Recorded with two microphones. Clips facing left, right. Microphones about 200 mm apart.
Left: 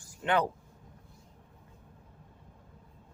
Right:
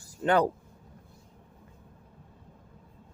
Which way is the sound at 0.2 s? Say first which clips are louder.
Right 4 dB; 40° right (ahead or behind).